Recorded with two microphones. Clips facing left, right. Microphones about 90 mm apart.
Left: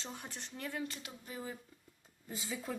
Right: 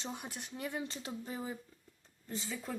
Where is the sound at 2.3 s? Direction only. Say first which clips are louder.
Right 1 dB; 5° left (ahead or behind).